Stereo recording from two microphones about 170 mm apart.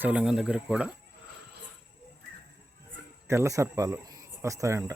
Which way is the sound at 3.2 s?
15° right (ahead or behind).